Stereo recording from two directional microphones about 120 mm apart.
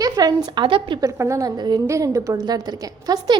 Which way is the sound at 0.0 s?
30° right (ahead or behind).